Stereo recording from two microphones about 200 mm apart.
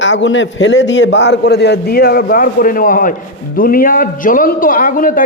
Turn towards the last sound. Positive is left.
turn(degrees=45)  # may be behind; listen again after turning